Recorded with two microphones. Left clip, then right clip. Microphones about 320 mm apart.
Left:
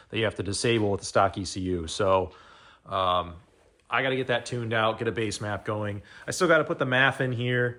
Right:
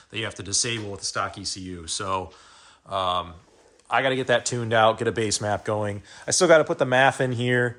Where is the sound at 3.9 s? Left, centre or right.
Right.